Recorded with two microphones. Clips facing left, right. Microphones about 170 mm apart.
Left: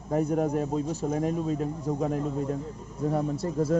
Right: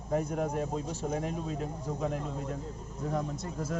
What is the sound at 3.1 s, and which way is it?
Speech, 30° left (ahead or behind).